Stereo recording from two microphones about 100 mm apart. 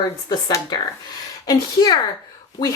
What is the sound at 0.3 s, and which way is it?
Speech, 40° left (ahead or behind).